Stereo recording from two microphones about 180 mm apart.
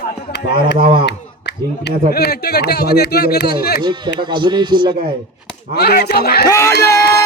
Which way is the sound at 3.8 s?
25° right (ahead or behind).